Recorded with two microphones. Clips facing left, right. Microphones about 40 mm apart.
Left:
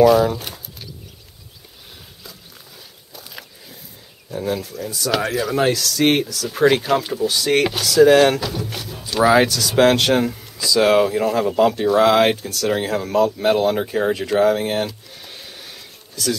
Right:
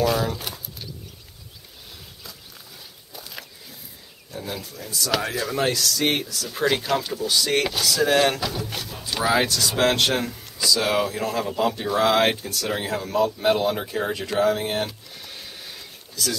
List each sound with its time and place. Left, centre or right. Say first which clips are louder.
0.0 s speech: left 9 dB; centre
3.1 s walk: left 1 dB; centre
4.3 s speech: left 9 dB; centre
5.9 s speech: left 6 dB; left; by 9.2 s centre
9.2 s speech: left 7 dB; centre
9.5 s speech: left 1 dB; centre
9.8 s speech: left 7 dB; centre
10.8 s speech: left 12 dB; centre
15.2 s a sound: left 1 dB; centre